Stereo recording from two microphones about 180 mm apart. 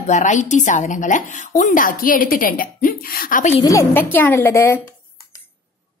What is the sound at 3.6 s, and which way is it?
A woman's voice, 15° left (ahead or behind).